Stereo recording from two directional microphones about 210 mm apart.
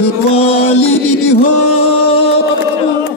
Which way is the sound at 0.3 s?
30° left (ahead or behind).